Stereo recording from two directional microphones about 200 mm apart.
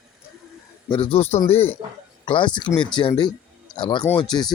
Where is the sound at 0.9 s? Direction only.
25° left (ahead or behind).